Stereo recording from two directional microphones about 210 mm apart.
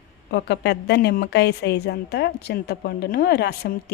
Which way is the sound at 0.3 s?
50° left (ahead or behind).